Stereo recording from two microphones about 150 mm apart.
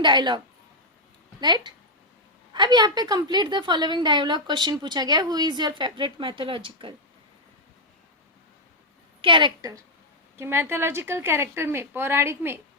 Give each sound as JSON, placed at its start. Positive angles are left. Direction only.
{"t": 0.0, "sound": "a woman's voice", "side_deg": -30}
{"t": 9.2, "sound": "a woman's voice", "side_deg": -30}